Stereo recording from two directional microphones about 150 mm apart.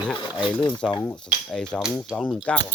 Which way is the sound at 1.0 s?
5° left (ahead or behind).